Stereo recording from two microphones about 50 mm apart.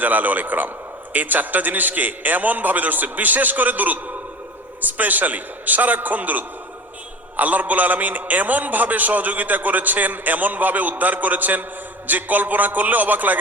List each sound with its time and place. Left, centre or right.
0.0 s a man's voice: right